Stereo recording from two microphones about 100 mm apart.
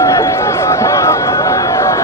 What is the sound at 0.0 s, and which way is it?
Run, 30° left (ahead or behind).